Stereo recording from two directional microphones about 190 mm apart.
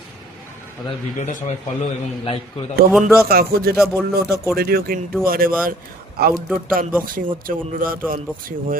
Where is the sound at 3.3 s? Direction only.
55° right (ahead or behind).